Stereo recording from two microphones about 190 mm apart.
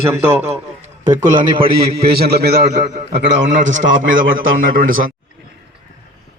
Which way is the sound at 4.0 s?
45° right (ahead or behind).